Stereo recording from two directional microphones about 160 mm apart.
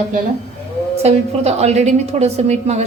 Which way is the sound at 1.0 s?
40° right (ahead or behind).